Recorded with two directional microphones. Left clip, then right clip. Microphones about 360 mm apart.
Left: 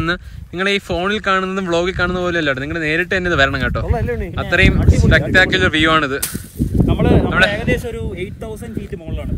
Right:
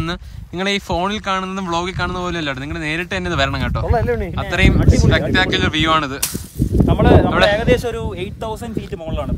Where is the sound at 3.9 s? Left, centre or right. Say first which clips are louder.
Right 3 dB; right.